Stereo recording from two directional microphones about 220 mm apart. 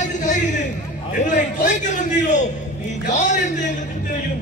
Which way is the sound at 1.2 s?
35° left (ahead or behind).